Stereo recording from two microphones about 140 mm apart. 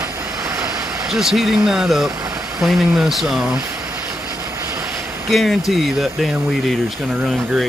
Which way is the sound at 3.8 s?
5° right (ahead or behind).